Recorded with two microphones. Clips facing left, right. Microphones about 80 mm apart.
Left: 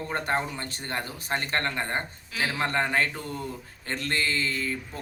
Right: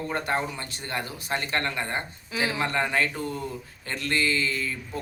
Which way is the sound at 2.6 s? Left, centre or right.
Left.